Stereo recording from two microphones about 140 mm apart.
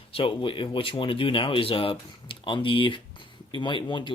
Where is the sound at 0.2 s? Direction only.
40° left (ahead or behind).